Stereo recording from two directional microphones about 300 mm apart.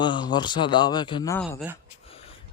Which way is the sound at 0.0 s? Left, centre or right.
Centre.